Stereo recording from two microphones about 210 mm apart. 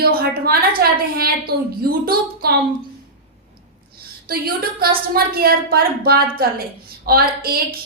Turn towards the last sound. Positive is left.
turn(degrees=-45)  # may be behind; listen again after turning